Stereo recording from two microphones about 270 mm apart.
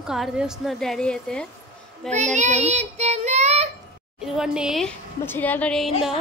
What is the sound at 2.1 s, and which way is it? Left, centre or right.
Child singing, right.